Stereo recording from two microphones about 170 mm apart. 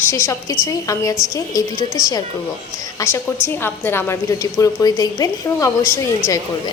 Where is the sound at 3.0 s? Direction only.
20° left (ahead or behind).